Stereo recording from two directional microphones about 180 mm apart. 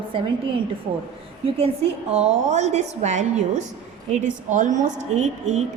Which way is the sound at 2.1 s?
35° right (ahead or behind).